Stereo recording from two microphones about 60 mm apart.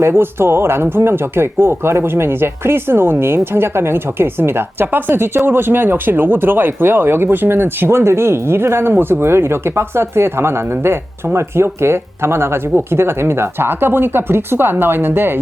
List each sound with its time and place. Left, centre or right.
0.0 s speech: right